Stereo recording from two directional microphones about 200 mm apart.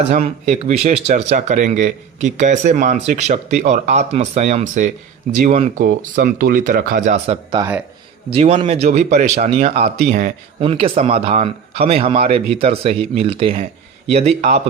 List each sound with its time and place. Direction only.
0.2 s speech: 30° right (ahead or behind)
7.6 s speech: 25° right (ahead or behind); by 10.3 s 40° right (ahead or behind)
10.6 s speech: 30° right (ahead or behind)